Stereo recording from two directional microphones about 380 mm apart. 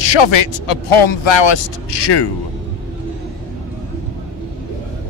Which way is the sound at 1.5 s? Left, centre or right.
Left.